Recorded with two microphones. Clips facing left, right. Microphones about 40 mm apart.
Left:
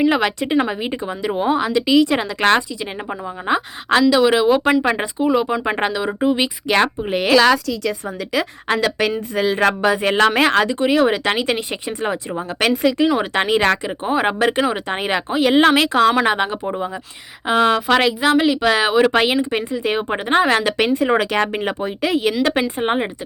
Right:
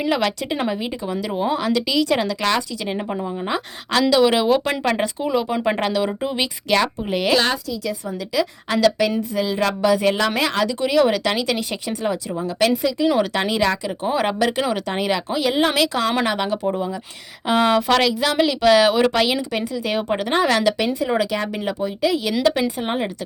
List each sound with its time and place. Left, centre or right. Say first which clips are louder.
0.1 s a woman's voice: left 3 dB; left
3.4 s a woman's voice: left 5 dB; left
4.1 s a woman's voice: right 2 dB; centre; by 7.3 s left
7.7 s a woman's voice: left 3 dB; left
14.0 s a woman's voice: left 1 dB; left
15.7 s a woman's voice: left 5 dB; left
17.5 s a woman's voice: left 2 dB; centre
19.1 s speech: left 3 dB; left
20.7 s a woman's voice: left 4 dB; left